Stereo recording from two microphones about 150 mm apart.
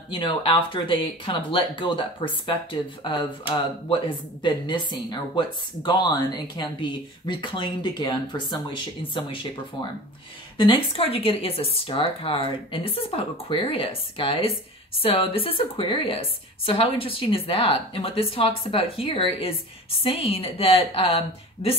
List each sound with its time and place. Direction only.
0.1 s speech: 35° left (ahead or behind)
10.6 s speech: 35° left (ahead or behind)